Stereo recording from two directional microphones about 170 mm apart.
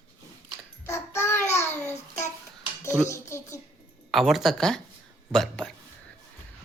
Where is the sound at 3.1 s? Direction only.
15° left (ahead or behind).